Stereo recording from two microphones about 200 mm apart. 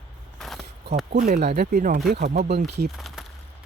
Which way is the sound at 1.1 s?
40° right (ahead or behind).